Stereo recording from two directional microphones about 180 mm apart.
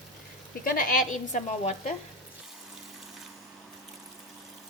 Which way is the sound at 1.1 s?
40° left (ahead or behind).